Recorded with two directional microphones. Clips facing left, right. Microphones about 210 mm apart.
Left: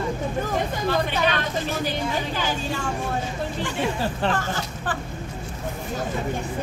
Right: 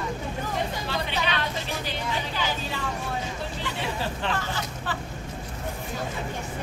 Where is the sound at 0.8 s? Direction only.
50° left (ahead or behind).